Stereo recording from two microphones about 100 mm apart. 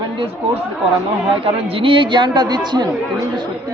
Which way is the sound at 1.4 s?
70° right (ahead or behind).